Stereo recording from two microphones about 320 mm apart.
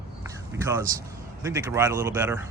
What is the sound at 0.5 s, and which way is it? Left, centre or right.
Speech, centre.